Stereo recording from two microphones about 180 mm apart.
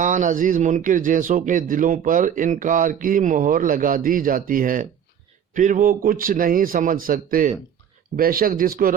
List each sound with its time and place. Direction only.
0.0 s speech: 45° right (ahead or behind)